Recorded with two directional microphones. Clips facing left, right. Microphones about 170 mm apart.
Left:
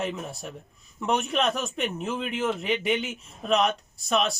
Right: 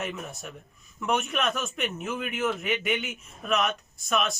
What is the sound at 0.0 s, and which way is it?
A man's voice, 30° left (ahead or behind).